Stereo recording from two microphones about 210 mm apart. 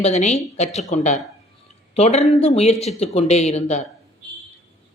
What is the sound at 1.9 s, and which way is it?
Speech, 30° left (ahead or behind).